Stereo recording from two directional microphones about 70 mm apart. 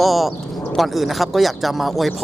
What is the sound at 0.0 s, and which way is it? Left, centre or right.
Speech, centre.